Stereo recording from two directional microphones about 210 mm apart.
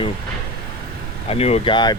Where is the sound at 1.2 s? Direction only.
30° left (ahead or behind).